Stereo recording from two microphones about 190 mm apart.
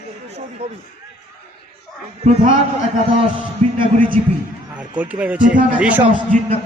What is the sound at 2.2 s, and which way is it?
Speech, 35° right (ahead or behind).